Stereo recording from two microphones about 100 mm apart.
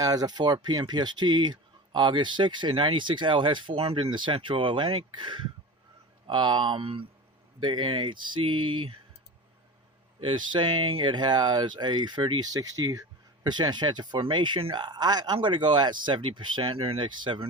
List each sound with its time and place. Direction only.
0.0 s speech: 40° right (ahead or behind); by 7.0 s 65° right (ahead or behind)
7.6 s speech: 55° right (ahead or behind)
10.2 s speech: 50° right (ahead or behind)